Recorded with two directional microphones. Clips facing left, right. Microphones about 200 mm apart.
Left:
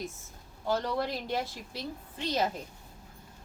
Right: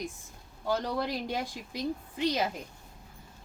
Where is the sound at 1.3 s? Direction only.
15° right (ahead or behind).